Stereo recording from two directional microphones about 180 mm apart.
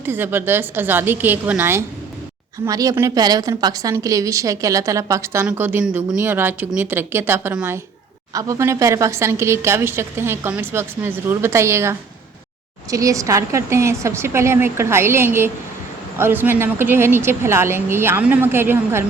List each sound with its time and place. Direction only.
0.0 s a woman's voice: 10° right (ahead or behind)